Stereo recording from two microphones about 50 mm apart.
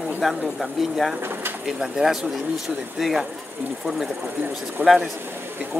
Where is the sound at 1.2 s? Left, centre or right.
Right.